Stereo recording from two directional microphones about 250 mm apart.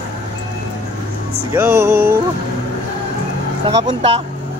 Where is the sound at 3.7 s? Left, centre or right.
Right.